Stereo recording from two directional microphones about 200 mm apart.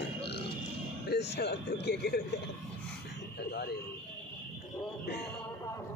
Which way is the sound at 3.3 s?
55° left (ahead or behind).